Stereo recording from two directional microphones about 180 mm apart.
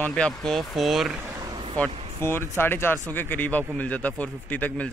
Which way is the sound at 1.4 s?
25° right (ahead or behind).